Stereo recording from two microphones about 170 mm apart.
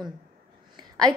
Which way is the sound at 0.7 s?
25° right (ahead or behind).